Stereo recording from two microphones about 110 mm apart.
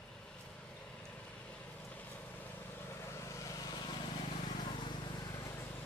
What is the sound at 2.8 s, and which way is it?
Vehicle, 25° left (ahead or behind).